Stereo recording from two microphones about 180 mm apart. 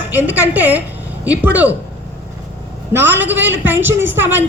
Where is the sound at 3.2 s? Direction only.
10° right (ahead or behind).